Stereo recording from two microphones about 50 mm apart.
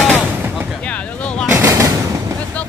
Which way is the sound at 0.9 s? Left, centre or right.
Left.